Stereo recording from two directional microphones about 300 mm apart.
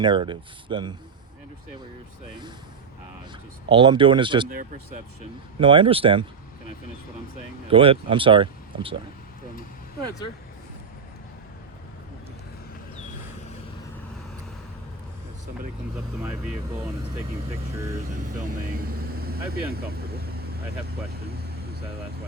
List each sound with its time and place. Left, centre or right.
0.0 s speech: centre
3.7 s speech: centre
5.5 s speech: centre
7.7 s speech: centre
18.1 s speech: right